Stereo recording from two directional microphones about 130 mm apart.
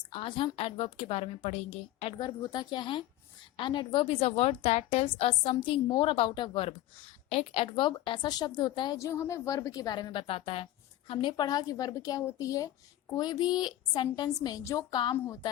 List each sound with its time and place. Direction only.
0.1 s a woman's voice: 40° left (ahead or behind)
2.1 s a woman's voice: 30° left (ahead or behind)
9.0 s a woman's voice: 25° left (ahead or behind)
15.1 s a woman's voice: 20° left (ahead or behind)